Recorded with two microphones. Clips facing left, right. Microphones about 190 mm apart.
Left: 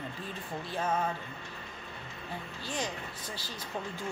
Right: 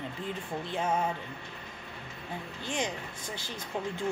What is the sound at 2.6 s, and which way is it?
Speech, 20° right (ahead or behind).